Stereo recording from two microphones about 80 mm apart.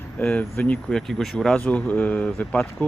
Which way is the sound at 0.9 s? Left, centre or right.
Centre.